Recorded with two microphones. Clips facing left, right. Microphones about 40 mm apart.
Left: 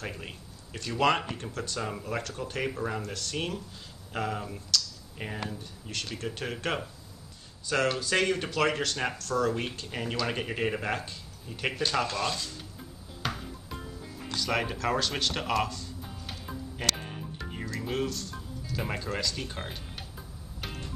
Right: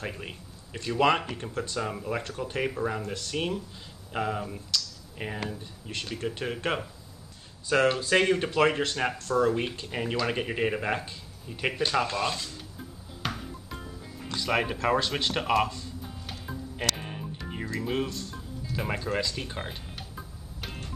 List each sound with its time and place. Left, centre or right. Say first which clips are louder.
0.0 s speech: right 2 dB; centre
13.2 s music: even; centre
14.4 s speech: right 3 dB; centre
16.3 s music: right 1 dB; centre
17.7 s speech: right 1 dB; centre
18.8 s speech: right 3 dB; centre